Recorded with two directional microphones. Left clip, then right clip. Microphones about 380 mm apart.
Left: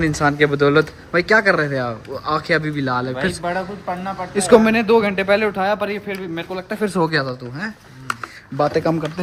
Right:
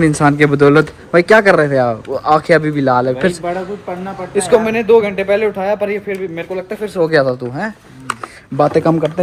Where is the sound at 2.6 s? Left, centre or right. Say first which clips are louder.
Right 8 dB; centre.